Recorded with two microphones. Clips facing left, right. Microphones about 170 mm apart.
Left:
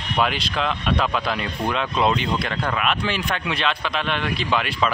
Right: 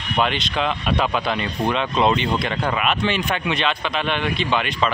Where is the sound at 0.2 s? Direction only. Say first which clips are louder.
Right 1 dB; centre (ahead or behind).